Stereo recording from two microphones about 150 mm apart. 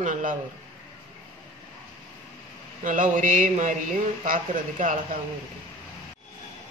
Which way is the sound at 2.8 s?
60° right (ahead or behind).